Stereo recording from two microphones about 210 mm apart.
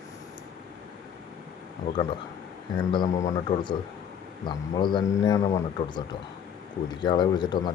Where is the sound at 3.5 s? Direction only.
20° left (ahead or behind).